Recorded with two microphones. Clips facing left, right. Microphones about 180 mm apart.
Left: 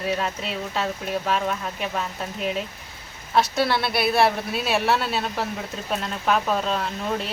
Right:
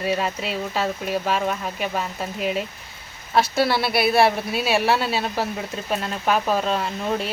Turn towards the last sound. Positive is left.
turn(degrees=-5)  # may be behind; listen again after turning